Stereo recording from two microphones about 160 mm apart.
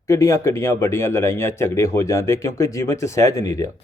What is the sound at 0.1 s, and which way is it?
Speech, 20° left (ahead or behind).